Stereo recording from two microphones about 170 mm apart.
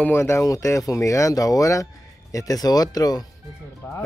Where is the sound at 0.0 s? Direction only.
15° left (ahead or behind).